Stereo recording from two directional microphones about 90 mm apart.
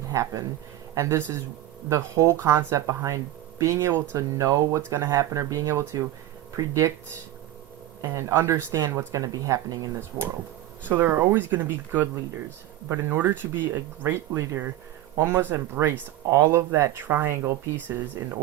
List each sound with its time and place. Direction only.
0.1 s speech: 35° right (ahead or behind)
8.1 s speech: 30° right (ahead or behind)
10.8 s speech: 25° right (ahead or behind)
17.0 s speech: 25° right (ahead or behind)